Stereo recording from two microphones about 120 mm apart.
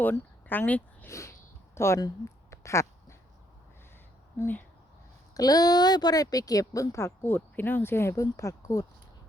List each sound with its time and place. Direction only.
0.0 s a sound: 15° left (ahead or behind)
4.4 s speech: 15° left (ahead or behind)
5.3 s speech: 30° left (ahead or behind)